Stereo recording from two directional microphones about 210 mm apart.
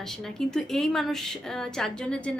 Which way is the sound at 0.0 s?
Centre (ahead or behind).